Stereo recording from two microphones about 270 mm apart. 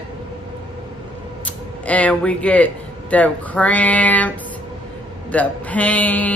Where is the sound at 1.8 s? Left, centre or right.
Centre.